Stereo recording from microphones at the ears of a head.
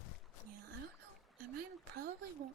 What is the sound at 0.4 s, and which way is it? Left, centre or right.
Whispering, right.